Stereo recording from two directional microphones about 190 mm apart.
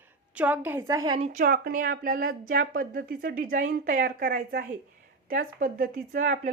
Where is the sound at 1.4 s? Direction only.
50° right (ahead or behind).